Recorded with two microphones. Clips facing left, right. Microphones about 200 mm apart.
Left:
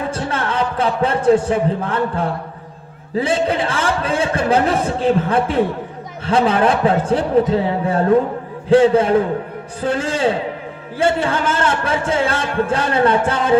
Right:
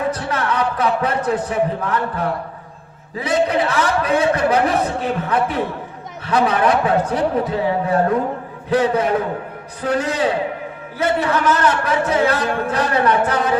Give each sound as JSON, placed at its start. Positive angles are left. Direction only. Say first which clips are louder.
{"t": 0.1, "sound": "a man's voice", "louder": "even", "side_deg": 30}